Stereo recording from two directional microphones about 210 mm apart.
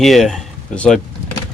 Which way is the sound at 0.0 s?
Centre (ahead or behind).